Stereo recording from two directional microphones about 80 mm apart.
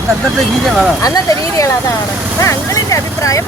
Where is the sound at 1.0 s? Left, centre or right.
Left.